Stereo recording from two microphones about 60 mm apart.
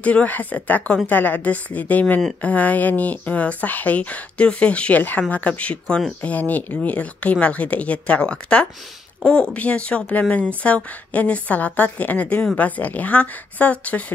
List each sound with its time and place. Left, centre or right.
0.0 s speech: left